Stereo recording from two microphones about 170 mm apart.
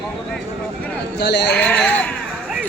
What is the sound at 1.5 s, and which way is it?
Sheep, 5° left (ahead or behind).